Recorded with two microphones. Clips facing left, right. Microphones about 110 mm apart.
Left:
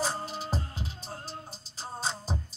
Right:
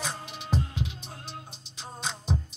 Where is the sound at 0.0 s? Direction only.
35° left (ahead or behind).